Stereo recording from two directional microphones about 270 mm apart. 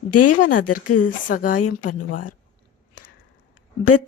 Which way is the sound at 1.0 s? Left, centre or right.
Left.